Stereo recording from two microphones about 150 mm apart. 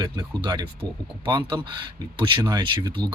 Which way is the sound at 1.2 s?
30° right (ahead or behind).